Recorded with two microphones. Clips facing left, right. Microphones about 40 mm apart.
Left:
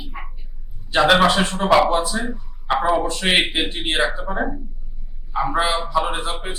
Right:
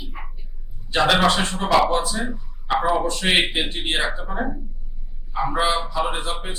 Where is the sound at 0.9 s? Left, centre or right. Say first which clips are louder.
Left 3 dB; centre.